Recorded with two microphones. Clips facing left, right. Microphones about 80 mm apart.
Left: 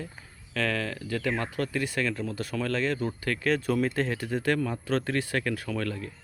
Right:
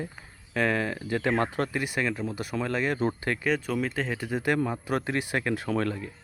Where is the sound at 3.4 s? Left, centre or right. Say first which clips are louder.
Left 3 dB; centre; by 6.1 s right.